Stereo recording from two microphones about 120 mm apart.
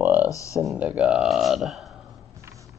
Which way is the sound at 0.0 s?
15° right (ahead or behind).